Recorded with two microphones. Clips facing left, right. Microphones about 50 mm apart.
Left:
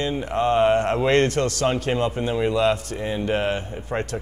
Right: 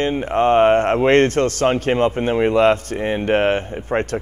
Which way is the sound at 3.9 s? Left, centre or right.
Right.